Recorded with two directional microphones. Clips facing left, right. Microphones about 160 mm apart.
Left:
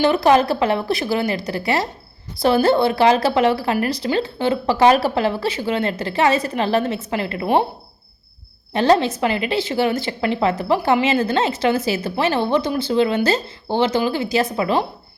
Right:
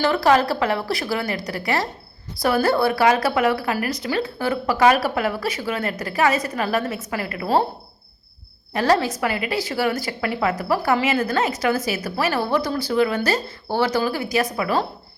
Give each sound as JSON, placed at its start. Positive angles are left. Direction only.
{"t": 0.0, "sound": "speech", "side_deg": 20}
{"t": 8.7, "sound": "speech", "side_deg": 25}